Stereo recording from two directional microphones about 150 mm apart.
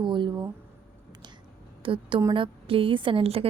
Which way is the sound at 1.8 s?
35° right (ahead or behind).